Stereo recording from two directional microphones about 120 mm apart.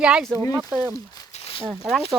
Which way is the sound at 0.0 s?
5° right (ahead or behind).